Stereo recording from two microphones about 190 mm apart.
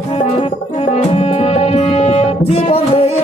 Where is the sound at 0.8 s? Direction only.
30° left (ahead or behind).